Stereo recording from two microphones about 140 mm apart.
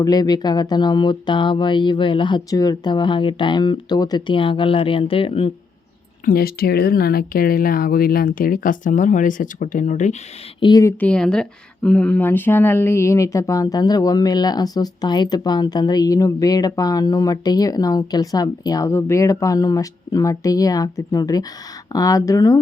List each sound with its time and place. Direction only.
0.0 s speech: 25° left (ahead or behind)
6.2 s speech: 90° left; by 10.2 s 60° left (ahead or behind)
10.6 s speech: 30° left (ahead or behind)
11.0 s speech: 5° left (ahead or behind); by 22.5 s 25° left (ahead or behind)